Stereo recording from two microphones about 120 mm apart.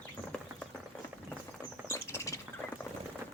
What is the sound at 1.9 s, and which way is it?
Bird, 25° left (ahead or behind).